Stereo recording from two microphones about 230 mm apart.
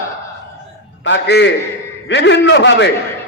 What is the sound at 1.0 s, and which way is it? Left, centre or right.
A man's voice, left.